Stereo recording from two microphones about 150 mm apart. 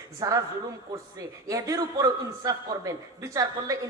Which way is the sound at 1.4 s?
20° right (ahead or behind).